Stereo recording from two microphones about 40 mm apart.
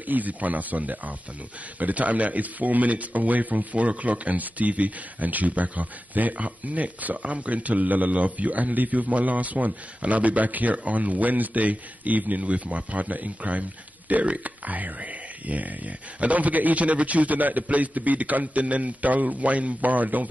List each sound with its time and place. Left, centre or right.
0.0 s a man's voice: right